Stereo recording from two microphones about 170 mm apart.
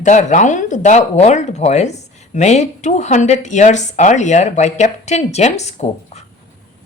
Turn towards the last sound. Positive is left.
turn(degrees=40)  # may be behind; listen again after turning